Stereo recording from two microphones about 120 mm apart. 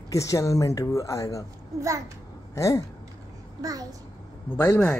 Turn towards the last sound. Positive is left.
turn(degrees=15)  # may be behind; listen again after turning